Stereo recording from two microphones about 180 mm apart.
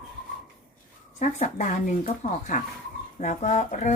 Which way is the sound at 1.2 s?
45° left (ahead or behind).